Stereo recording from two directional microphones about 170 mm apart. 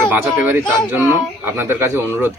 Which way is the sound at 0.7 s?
15° right (ahead or behind).